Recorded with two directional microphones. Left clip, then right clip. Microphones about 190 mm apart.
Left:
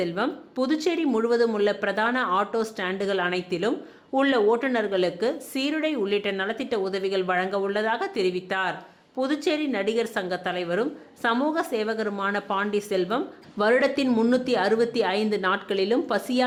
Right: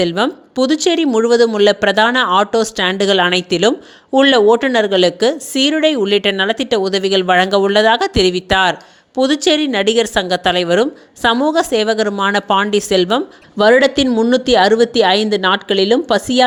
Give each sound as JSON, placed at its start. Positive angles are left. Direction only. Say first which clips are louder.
{"t": 0.0, "sound": "speech", "louder": "right 11 dB", "side_deg": -40}